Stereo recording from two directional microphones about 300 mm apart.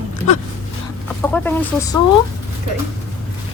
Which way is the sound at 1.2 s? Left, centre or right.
Centre.